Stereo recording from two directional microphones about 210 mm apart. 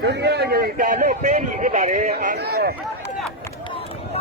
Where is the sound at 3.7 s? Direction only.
25° left (ahead or behind).